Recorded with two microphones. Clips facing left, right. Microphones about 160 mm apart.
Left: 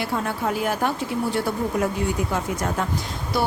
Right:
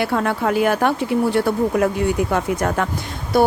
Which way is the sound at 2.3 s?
65° right (ahead or behind).